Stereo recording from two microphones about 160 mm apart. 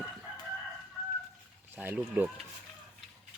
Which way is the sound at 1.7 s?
15° right (ahead or behind).